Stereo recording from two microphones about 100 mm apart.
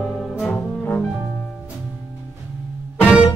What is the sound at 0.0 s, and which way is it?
Music, centre (ahead or behind).